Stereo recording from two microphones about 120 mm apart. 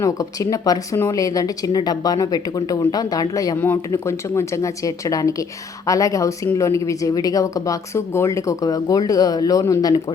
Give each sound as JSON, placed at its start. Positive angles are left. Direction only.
{"t": 0.0, "sound": "speech", "side_deg": 30}